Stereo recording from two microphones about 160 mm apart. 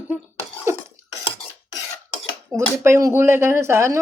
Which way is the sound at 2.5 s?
15° right (ahead or behind).